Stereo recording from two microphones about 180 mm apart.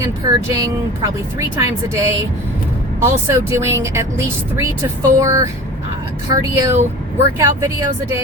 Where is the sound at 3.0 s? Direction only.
15° right (ahead or behind).